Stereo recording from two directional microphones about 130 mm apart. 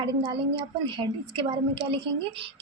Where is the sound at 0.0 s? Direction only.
35° right (ahead or behind).